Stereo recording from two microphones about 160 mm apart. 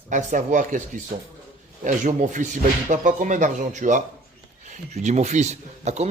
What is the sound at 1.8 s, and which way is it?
Speech, 50° right (ahead or behind).